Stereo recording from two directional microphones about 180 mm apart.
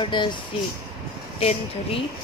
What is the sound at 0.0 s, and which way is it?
Speech, 25° left (ahead or behind).